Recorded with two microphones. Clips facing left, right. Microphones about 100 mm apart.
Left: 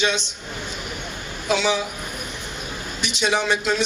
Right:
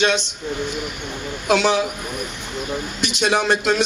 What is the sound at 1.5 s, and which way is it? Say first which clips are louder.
Speech: right 4 dB; 60° right (ahead or behind).